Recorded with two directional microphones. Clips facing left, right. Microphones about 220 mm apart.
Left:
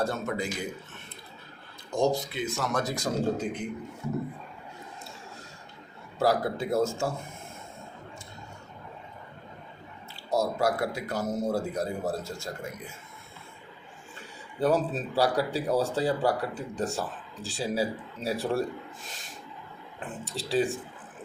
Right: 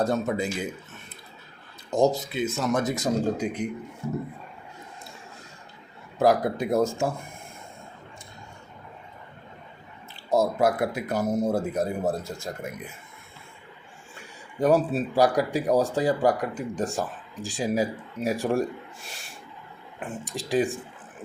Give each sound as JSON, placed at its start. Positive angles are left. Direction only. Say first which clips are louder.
{"t": 0.0, "sound": "speech", "louder": "right 5 dB", "side_deg": -20}
{"t": 1.9, "sound": "speech", "louder": "right 4 dB", "side_deg": -20}
{"t": 3.4, "sound": "speech", "louder": "right 4 dB", "side_deg": -10}
{"t": 6.1, "sound": "speech", "louder": "right 4 dB", "side_deg": -15}
{"t": 10.2, "sound": "speech", "louder": "right 4 dB", "side_deg": -20}
{"t": 14.2, "sound": "speech", "louder": "right 3 dB", "side_deg": -10}
{"t": 19.0, "sound": "a sound", "louder": "right 1 dB", "side_deg": -10}
{"t": 20.0, "sound": "speech", "louder": "right 3 dB", "side_deg": -15}